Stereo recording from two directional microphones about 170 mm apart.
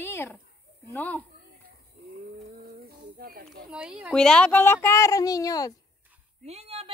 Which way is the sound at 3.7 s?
5° right (ahead or behind).